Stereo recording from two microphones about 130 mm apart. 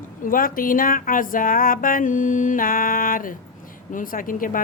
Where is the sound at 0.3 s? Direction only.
90° left.